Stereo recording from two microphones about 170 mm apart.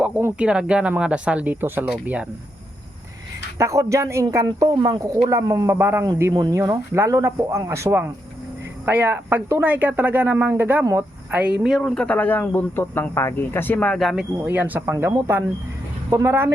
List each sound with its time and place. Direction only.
0.0 s speech: 10° right (ahead or behind)
3.6 s speech: 20° right (ahead or behind); by 14.3 s centre (ahead or behind)
14.3 s speech: 10° right (ahead or behind)